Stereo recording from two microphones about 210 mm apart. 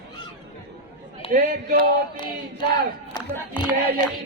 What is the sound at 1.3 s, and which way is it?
Speech, 40° right (ahead or behind).